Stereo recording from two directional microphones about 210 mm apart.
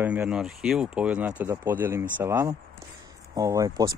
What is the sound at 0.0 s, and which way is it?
Speech, 5° right (ahead or behind).